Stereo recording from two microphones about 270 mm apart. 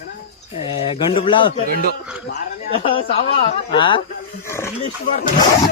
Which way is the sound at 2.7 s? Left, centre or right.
Centre.